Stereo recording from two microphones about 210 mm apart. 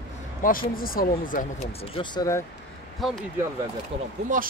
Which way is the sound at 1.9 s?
20° left (ahead or behind).